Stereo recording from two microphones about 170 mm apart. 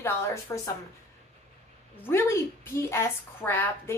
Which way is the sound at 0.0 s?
15° left (ahead or behind).